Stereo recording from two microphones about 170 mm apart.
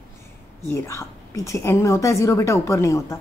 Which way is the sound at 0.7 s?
15° left (ahead or behind).